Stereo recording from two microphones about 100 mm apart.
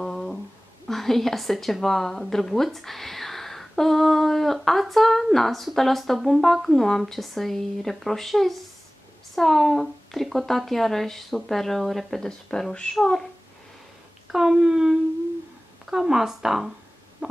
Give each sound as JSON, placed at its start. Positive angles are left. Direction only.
{"t": 0.0, "sound": "a sound", "side_deg": 5}
{"t": 0.8, "sound": "a woman's voice", "side_deg": 0}
{"t": 14.3, "sound": "a woman's voice", "side_deg": -5}
{"t": 17.2, "sound": "stomach rumble", "side_deg": -15}